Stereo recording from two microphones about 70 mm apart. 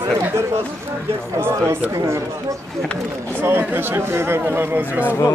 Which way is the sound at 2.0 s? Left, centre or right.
Right.